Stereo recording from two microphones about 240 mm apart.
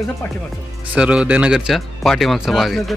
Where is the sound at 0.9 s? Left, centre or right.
Centre.